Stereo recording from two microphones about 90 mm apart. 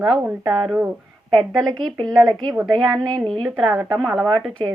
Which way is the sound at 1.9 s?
50° right (ahead or behind).